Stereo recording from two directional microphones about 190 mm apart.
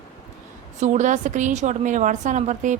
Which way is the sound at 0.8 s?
40° right (ahead or behind).